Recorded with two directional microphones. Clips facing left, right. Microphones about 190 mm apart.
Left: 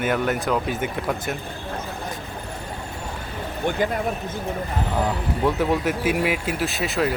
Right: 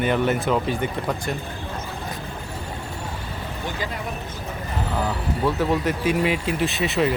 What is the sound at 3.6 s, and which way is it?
Speech, 55° left (ahead or behind).